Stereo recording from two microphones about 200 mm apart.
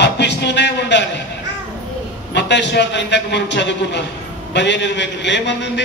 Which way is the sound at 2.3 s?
60° left (ahead or behind).